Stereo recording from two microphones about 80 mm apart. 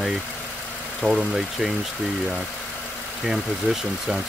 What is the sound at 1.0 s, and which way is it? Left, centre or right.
Speech, centre.